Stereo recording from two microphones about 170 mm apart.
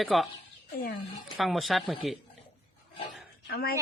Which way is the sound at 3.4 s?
65° left (ahead or behind).